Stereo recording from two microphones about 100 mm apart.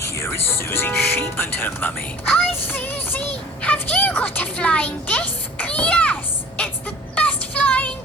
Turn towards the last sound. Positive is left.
turn(degrees=15)  # may be behind; listen again after turning